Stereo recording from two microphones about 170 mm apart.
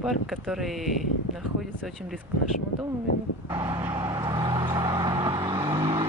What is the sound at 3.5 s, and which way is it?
Vehicle, 30° right (ahead or behind).